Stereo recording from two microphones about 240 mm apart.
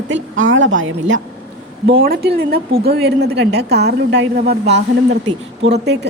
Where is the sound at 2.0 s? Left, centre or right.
Right.